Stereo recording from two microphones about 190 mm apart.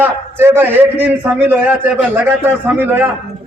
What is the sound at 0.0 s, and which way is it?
A man's voice, 10° right (ahead or behind).